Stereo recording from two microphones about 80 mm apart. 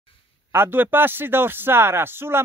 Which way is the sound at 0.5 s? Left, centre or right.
Right.